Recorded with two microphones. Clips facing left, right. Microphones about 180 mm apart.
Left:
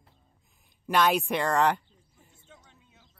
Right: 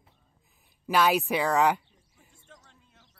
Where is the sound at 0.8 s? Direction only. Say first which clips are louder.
Even; 5° right (ahead or behind).